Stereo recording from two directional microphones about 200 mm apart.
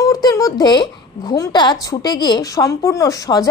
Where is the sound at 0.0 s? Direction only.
15° left (ahead or behind).